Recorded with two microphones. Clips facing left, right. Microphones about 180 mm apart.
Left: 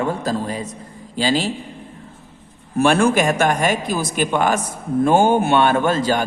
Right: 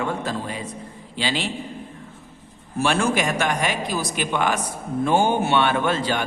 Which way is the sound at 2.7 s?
55° left (ahead or behind).